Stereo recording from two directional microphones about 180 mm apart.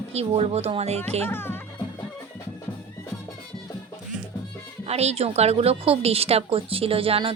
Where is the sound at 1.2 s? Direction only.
10° left (ahead or behind).